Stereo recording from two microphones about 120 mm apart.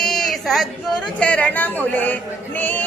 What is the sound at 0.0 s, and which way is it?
A woman's voice, 5° left (ahead or behind).